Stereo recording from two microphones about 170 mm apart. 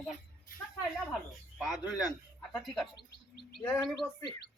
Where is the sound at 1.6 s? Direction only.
5° right (ahead or behind).